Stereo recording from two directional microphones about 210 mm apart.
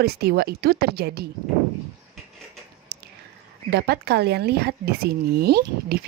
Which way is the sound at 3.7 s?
50° right (ahead or behind).